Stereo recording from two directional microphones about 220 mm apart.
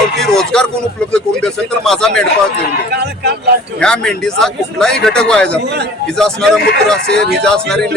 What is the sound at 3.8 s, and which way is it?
Speech, 5° left (ahead or behind).